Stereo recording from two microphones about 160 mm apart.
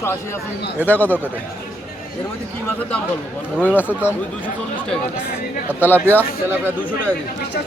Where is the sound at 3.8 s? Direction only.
10° left (ahead or behind).